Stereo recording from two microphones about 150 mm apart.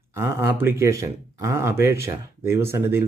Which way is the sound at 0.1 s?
20° right (ahead or behind).